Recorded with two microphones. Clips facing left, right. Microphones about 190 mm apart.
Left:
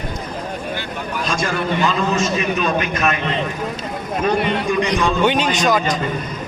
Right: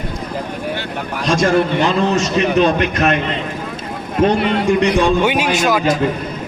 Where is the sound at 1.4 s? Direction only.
50° right (ahead or behind).